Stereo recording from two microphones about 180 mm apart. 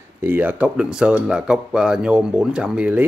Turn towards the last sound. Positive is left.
turn(degrees=-5)  # may be behind; listen again after turning